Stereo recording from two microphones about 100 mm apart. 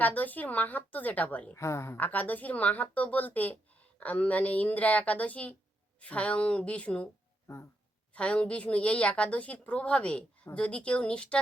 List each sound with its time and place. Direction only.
0.0 s a woman's voice: 15° left (ahead or behind)
1.5 s a woman's voice: 30° left (ahead or behind)
2.0 s a woman's voice: 15° left (ahead or behind)
7.4 s speech: 25° left (ahead or behind)
8.1 s a woman's voice: 10° left (ahead or behind)